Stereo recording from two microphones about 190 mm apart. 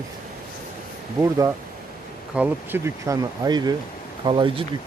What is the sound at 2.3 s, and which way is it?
Speech, 10° right (ahead or behind).